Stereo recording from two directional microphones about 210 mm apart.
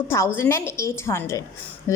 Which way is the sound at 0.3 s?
10° left (ahead or behind).